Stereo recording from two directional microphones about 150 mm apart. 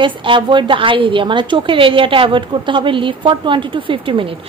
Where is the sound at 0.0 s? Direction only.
35° right (ahead or behind).